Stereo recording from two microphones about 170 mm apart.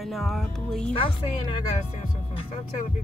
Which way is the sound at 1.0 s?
30° left (ahead or behind).